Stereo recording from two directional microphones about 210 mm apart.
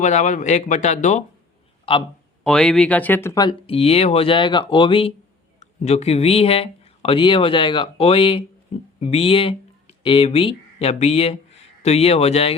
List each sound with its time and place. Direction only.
0.0 s speech: 35° left (ahead or behind)
2.4 s speech: 5° left (ahead or behind); by 12.5 s 30° left (ahead or behind)